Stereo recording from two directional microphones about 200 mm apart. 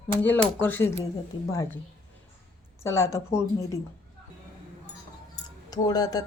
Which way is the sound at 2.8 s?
15° left (ahead or behind).